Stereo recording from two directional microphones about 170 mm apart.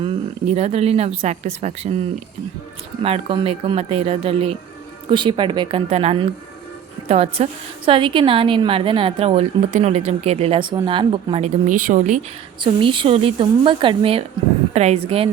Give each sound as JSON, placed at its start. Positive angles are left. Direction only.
{"t": 0.0, "sound": "a woman's voice", "side_deg": -40}
{"t": 3.0, "sound": "a woman's voice", "side_deg": -35}
{"t": 12.6, "sound": "a woman's voice", "side_deg": -30}